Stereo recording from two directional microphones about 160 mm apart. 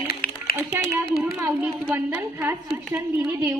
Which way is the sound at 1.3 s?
10° right (ahead or behind).